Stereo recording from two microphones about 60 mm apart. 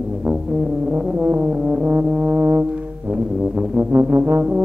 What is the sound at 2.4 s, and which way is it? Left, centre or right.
Brass instrument, right.